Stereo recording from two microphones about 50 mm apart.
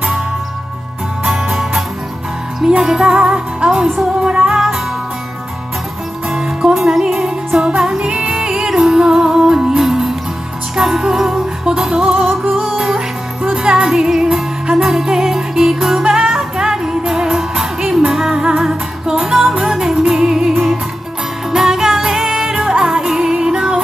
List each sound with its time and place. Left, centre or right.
1.2 s music: centre
6.2 s music: centre
12.3 s music: centre
12.6 s music: centre